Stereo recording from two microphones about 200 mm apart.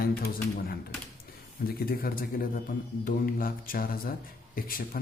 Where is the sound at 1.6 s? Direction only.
45° left (ahead or behind).